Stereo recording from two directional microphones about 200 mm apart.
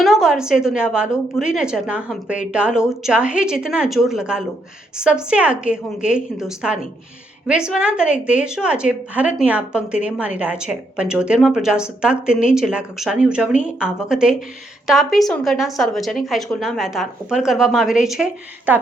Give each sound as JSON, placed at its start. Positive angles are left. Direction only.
{"t": 0.0, "sound": "a woman's voice", "side_deg": 0}